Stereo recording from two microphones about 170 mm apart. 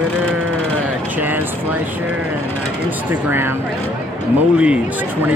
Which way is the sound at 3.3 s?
15° right (ahead or behind).